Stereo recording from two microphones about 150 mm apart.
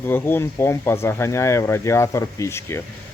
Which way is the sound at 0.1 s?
15° left (ahead or behind).